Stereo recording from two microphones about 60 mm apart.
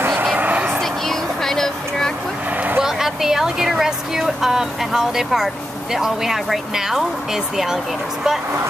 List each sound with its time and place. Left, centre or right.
0.1 s vehicle: right
0.7 s vehicle: centre
2.5 s vehicle: right
2.8 s a woman's voice: centre